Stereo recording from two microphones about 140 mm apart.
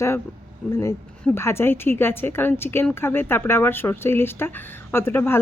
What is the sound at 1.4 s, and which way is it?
Speech, 15° left (ahead or behind).